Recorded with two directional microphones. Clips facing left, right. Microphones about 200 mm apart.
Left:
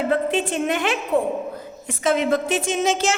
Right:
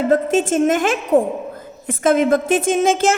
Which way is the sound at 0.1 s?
45° right (ahead or behind).